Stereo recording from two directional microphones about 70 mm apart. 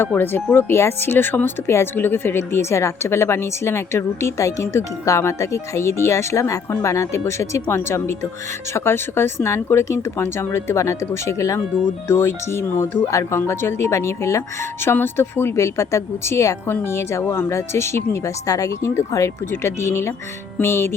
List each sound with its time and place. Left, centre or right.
0.0 s speech: left
13.0 s speech: left
13.4 s speech: left
18.4 s speech: left